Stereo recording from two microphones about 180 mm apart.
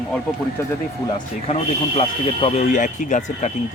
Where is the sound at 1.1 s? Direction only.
35° left (ahead or behind).